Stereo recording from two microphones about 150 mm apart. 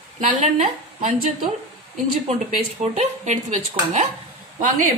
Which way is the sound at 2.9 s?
50° right (ahead or behind).